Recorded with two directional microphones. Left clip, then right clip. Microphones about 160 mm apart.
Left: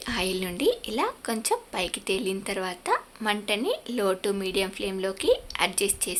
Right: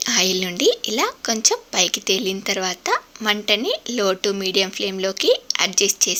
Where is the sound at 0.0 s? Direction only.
20° right (ahead or behind).